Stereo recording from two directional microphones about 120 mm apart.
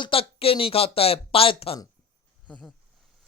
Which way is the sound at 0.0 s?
50° left (ahead or behind).